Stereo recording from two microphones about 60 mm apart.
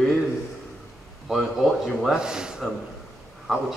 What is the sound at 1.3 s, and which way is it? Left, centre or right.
Speech, centre.